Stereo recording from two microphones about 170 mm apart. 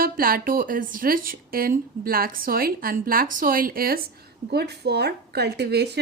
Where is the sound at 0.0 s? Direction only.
60° right (ahead or behind).